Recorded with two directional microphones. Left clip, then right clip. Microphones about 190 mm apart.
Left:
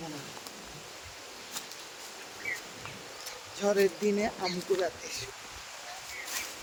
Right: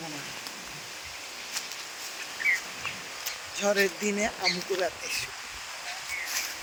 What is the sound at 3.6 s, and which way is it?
Speech, centre (ahead or behind).